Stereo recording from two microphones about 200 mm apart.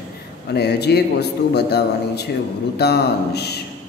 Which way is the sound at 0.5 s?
55° left (ahead or behind).